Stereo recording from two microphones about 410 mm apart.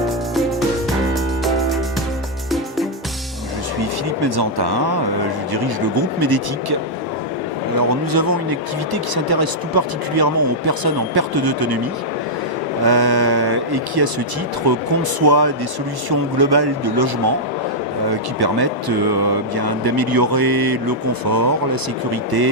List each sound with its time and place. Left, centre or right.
1.5 s music: centre
4.2 s speech: right
7.8 s speech: right
12.8 s speech: right
15.2 s speech: right
18.3 s speech: right